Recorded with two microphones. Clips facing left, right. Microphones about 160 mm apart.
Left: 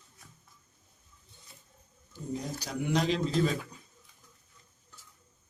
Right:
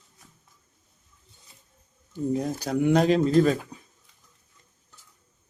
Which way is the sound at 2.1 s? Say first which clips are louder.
Right 10 dB; 55° right (ahead or behind).